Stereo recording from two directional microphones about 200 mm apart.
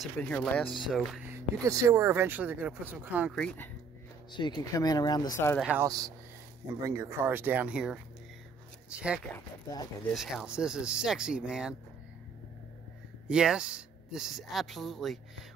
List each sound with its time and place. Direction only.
0.0 s speech: 5° left (ahead or behind)
1.3 s speech: 15° right (ahead or behind)
3.3 s speech: 5° left (ahead or behind)
4.3 s speech: 20° left (ahead or behind)
5.6 s speech: 5° right (ahead or behind)
5.9 s speech: 20° right (ahead or behind)
9.3 s speech: 15° left (ahead or behind)
10.1 s speech: centre (ahead or behind)
13.3 s speech: 5° right (ahead or behind)